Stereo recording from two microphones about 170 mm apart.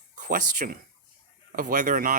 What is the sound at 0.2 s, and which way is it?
Speech, 55° right (ahead or behind).